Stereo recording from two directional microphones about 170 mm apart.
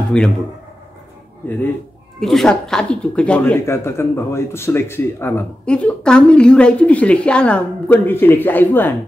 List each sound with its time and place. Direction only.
0.1 s speech: 5° left (ahead or behind)
2.1 s speech: centre (ahead or behind)